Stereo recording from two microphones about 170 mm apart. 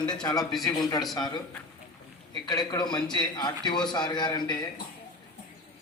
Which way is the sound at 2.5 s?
25° left (ahead or behind).